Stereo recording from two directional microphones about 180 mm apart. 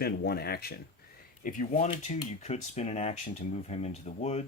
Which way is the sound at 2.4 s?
35° left (ahead or behind).